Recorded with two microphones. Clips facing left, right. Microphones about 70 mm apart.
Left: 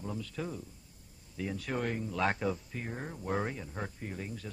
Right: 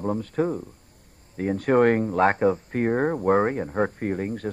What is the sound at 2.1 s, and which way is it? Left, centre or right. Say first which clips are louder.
Speech: right 12 dB; right.